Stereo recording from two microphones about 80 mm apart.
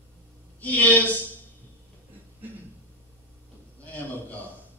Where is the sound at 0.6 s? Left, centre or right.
Centre.